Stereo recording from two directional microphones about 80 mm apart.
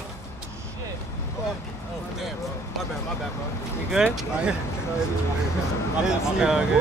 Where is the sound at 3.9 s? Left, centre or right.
Centre.